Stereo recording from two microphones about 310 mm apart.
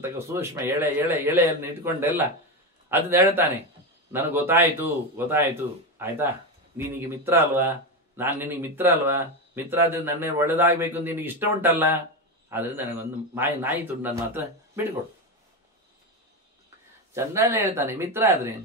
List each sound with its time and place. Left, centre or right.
0.0 s speech: centre
17.1 s speech: centre